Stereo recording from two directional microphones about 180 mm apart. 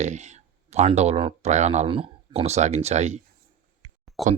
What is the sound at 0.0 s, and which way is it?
Speech, 40° right (ahead or behind).